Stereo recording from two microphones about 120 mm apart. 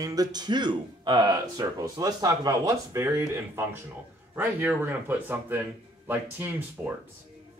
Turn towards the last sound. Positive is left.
turn(degrees=-15)  # may be behind; listen again after turning